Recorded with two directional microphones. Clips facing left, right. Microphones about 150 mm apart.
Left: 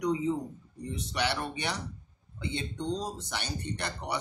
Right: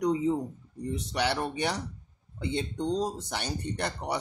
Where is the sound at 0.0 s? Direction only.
40° right (ahead or behind).